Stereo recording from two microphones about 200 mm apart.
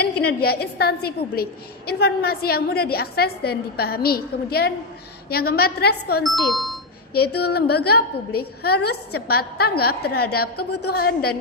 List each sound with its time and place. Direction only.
0.3 s a woman's voice: 50° left (ahead or behind)
6.2 s speech: centre (ahead or behind)
7.1 s a woman's voice: 55° left (ahead or behind)